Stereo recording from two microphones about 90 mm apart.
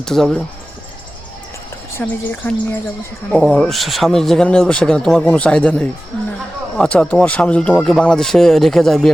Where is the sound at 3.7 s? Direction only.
Centre (ahead or behind).